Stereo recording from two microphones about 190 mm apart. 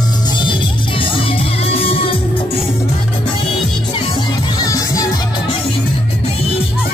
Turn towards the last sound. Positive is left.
turn(degrees=20)  # may be behind; listen again after turning